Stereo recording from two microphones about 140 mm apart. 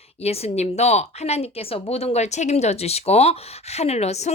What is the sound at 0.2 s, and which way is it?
A woman's voice, 45° left (ahead or behind).